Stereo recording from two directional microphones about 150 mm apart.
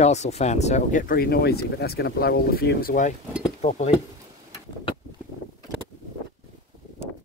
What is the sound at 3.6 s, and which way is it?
Speech, 50° left (ahead or behind).